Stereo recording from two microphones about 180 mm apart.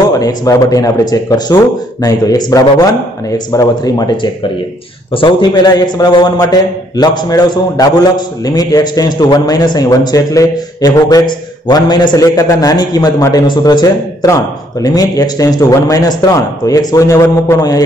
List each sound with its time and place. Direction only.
0.1 s a man's voice: 20° left (ahead or behind)